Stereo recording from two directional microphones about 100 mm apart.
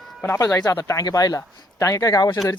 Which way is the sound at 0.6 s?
35° left (ahead or behind).